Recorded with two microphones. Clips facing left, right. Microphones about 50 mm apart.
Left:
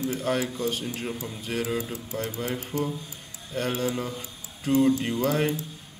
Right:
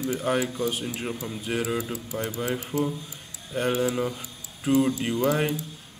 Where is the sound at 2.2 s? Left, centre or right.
Right.